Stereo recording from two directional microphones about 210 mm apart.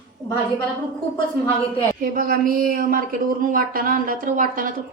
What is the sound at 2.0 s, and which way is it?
Speech, 40° right (ahead or behind).